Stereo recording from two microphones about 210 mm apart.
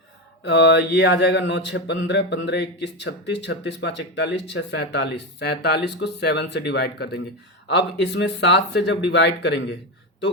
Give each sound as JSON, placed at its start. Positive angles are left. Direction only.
{"t": 0.4, "sound": "speech", "side_deg": 55}